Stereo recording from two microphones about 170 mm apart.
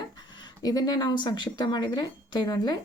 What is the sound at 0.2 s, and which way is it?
Speech, 25° left (ahead or behind).